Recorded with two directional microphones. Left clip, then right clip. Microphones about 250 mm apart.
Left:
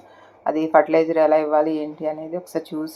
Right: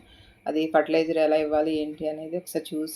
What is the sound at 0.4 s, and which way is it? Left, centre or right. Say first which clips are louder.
Speech: left 6 dB; centre.